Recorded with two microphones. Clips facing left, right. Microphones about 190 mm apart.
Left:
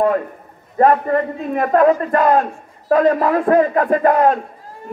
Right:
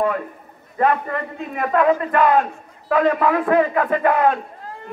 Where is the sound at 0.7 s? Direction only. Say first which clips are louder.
Left 6 dB; 40° left (ahead or behind).